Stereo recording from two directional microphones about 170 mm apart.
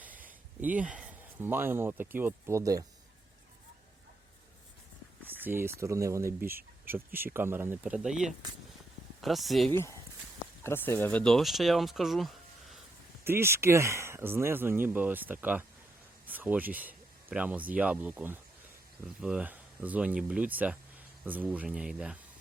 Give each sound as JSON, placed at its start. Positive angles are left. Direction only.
{"t": 0.6, "sound": "speech", "side_deg": -10}
{"t": 5.4, "sound": "speech", "side_deg": -15}
{"t": 9.7, "sound": "speech", "side_deg": 15}
{"t": 13.2, "sound": "speech", "side_deg": -15}